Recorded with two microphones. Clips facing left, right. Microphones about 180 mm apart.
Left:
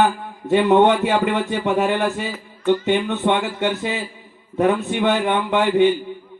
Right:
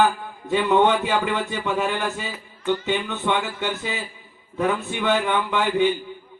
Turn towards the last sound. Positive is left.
turn(degrees=60)  # may be behind; listen again after turning